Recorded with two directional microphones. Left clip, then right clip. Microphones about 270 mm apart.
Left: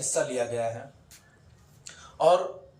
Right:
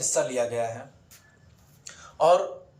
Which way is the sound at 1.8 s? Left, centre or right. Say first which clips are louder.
Right 1 dB; centre.